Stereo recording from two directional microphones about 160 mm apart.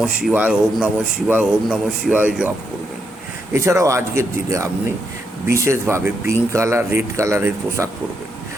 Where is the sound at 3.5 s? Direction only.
15° right (ahead or behind).